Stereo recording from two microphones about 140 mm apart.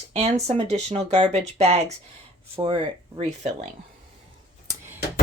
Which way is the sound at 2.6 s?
35° right (ahead or behind).